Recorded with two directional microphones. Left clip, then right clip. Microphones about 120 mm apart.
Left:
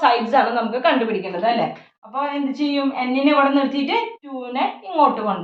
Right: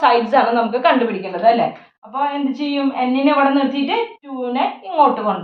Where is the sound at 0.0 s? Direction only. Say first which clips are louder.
Right 3 dB; 35° right (ahead or behind).